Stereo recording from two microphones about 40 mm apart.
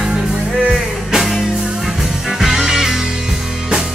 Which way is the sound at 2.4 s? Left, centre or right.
Centre.